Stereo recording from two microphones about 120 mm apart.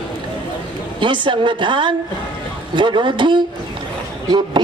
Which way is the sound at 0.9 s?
40° right (ahead or behind).